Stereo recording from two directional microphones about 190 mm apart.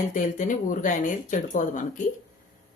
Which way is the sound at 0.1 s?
45° left (ahead or behind).